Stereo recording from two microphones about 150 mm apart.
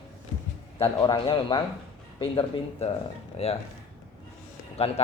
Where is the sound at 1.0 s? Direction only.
30° left (ahead or behind).